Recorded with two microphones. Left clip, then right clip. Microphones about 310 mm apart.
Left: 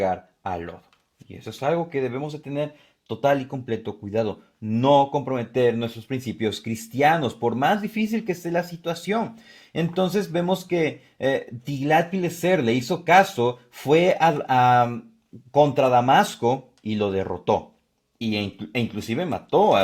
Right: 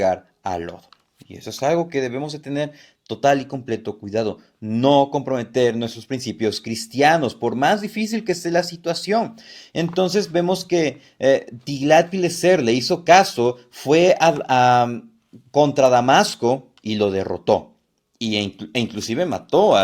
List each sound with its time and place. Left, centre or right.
0.0 s speech: left